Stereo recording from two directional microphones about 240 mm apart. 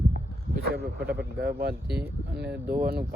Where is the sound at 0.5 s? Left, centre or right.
Right.